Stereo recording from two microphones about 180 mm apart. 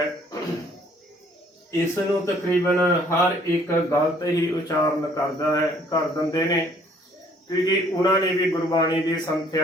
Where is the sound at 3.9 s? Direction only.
20° left (ahead or behind).